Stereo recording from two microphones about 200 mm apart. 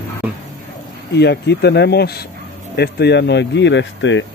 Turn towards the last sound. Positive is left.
turn(degrees=65)  # may be behind; listen again after turning